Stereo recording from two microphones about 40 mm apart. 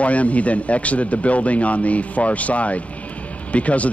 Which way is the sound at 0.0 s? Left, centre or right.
Left.